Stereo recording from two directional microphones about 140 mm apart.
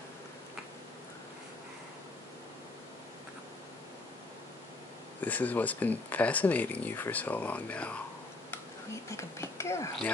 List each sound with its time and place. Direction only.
5.2 s speech: 10° left (ahead or behind)
9.1 s speech: 20° left (ahead or behind)